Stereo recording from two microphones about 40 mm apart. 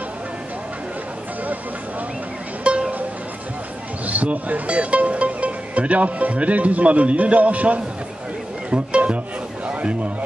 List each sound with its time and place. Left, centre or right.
2.6 s music: right
4.0 s speech: right
8.6 s music: right
9.7 s a sound: right